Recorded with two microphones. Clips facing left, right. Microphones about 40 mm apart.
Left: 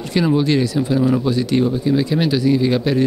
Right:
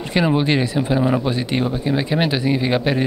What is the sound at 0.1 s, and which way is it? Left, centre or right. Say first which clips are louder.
Speech: left 1 dB; right.